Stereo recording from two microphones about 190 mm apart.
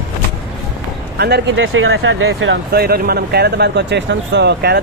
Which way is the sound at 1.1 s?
60° right (ahead or behind).